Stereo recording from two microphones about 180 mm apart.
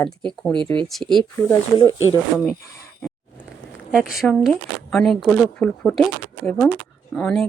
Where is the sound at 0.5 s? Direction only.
25° right (ahead or behind).